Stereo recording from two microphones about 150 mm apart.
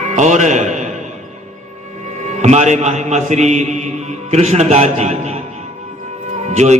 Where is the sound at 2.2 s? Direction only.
50° right (ahead or behind).